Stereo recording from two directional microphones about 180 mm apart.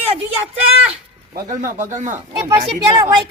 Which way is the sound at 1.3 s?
50° right (ahead or behind).